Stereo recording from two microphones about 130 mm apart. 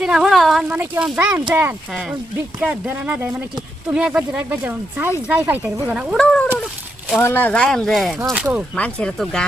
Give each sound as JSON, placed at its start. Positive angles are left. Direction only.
{"t": 0.0, "sound": "speech", "side_deg": -5}
{"t": 2.6, "sound": "speech", "side_deg": -10}
{"t": 6.1, "sound": "speech", "side_deg": 5}